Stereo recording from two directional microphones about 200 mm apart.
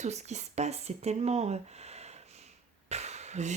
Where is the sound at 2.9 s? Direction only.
35° right (ahead or behind).